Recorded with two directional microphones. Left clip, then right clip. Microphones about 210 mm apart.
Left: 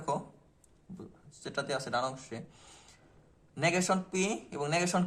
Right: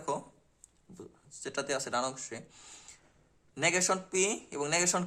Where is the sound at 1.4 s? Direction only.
35° right (ahead or behind).